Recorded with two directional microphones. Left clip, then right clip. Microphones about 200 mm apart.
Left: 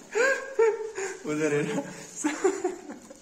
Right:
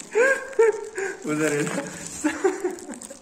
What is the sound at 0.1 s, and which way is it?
Dog, 15° left (ahead or behind).